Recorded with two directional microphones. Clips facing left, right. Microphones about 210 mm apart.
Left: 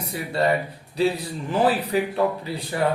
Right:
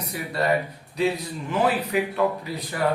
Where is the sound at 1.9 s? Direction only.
35° left (ahead or behind).